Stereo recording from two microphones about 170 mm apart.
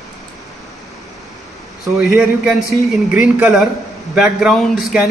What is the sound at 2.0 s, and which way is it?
Speech, centre (ahead or behind).